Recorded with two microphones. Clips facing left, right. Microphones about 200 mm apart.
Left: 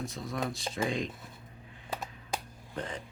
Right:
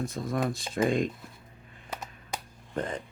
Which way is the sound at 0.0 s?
50° right (ahead or behind).